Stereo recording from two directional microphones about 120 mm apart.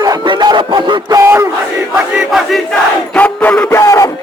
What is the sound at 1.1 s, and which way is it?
Battle cry, 20° right (ahead or behind).